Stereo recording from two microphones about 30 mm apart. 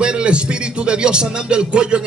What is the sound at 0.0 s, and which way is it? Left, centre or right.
A man's voice, right.